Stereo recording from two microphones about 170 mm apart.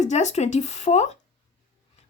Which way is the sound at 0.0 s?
45° left (ahead or behind).